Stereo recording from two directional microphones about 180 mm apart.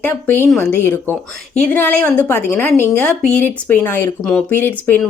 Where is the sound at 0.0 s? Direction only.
10° left (ahead or behind).